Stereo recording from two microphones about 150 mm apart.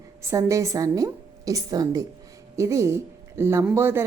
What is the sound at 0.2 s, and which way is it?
A woman's voice, 20° right (ahead or behind).